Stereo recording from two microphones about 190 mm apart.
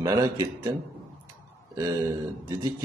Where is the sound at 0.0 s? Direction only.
15° right (ahead or behind).